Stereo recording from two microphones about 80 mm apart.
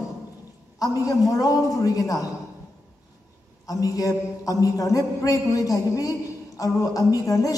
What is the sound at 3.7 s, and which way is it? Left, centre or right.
A man's voice, left.